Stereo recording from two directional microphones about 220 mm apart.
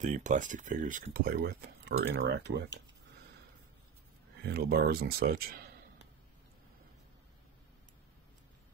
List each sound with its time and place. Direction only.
0.0 s speech: 35° right (ahead or behind); by 2.5 s 50° right (ahead or behind)
4.4 s a man's voice: 45° right (ahead or behind)